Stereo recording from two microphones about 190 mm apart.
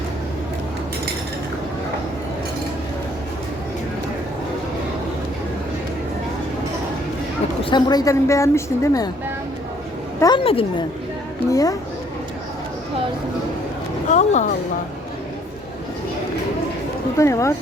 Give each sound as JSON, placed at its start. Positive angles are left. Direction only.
{"t": 7.6, "sound": "a woman's voice", "side_deg": 20}
{"t": 10.2, "sound": "a woman's voice", "side_deg": 25}
{"t": 11.5, "sound": "a woman's voice", "side_deg": 20}
{"t": 14.1, "sound": "a sound", "side_deg": 40}
{"t": 17.2, "sound": "a woman's voice", "side_deg": 15}